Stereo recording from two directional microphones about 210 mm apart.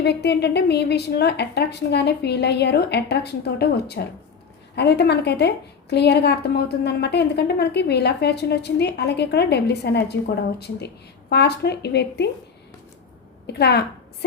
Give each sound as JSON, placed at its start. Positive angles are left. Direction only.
{"t": 0.0, "sound": "a woman's voice", "side_deg": 55}
{"t": 11.3, "sound": "a woman's voice", "side_deg": 50}
{"t": 13.5, "sound": "a woman's voice", "side_deg": 50}